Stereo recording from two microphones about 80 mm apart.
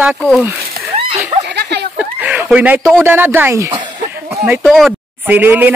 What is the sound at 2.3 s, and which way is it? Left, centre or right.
Speech, right.